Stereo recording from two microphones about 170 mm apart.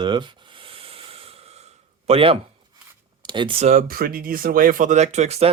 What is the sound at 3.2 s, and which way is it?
Speech, 30° right (ahead or behind).